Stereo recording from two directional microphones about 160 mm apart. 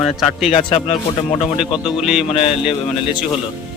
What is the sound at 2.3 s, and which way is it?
Speech, 35° left (ahead or behind).